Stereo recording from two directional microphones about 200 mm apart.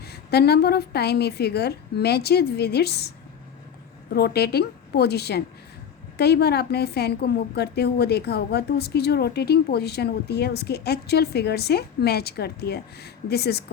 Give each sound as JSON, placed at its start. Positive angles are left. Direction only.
{"t": 0.0, "sound": "a woman's voice", "side_deg": 55}
{"t": 4.1, "sound": "a woman's voice", "side_deg": 55}